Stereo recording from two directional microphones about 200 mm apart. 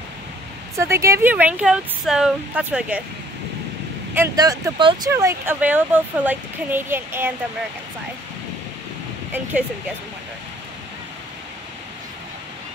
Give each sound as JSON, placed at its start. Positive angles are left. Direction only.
{"t": 0.7, "sound": "speech", "side_deg": -15}
{"t": 4.1, "sound": "speech", "side_deg": -15}
{"t": 9.3, "sound": "speech", "side_deg": -5}